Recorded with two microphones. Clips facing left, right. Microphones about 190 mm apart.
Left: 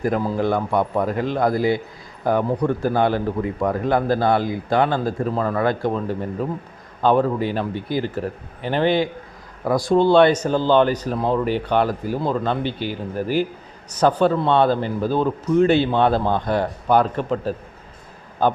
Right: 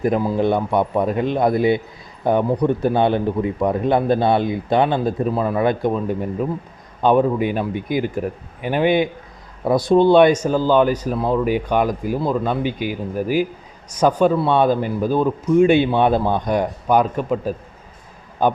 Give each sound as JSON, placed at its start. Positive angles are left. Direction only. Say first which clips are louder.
{"t": 0.0, "sound": "a man's voice", "louder": "right 3 dB", "side_deg": -15}